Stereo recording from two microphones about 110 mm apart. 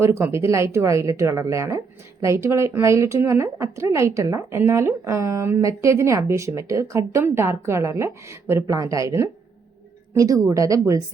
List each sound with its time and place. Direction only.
0.0 s a woman's voice: 25° right (ahead or behind)